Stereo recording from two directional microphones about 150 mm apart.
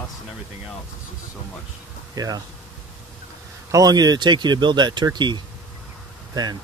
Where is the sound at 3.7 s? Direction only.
25° right (ahead or behind).